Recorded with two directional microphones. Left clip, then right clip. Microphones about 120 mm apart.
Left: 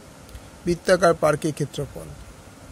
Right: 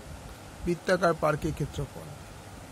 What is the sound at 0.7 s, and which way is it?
Speech, 40° left (ahead or behind).